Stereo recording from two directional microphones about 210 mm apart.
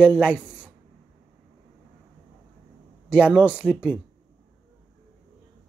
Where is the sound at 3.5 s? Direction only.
10° left (ahead or behind).